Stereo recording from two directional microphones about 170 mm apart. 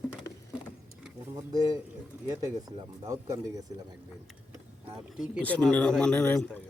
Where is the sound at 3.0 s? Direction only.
20° right (ahead or behind).